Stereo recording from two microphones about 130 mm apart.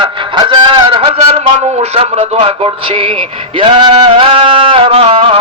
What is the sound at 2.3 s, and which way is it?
Music, 45° right (ahead or behind).